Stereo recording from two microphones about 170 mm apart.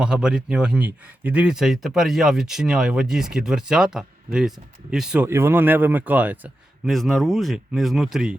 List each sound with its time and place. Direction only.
0.0 s speech: 5° right (ahead or behind)